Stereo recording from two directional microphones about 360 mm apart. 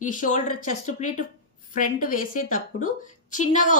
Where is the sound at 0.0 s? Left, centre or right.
Left.